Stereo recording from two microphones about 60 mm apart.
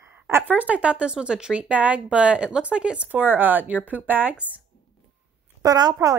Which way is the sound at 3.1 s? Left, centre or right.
Right.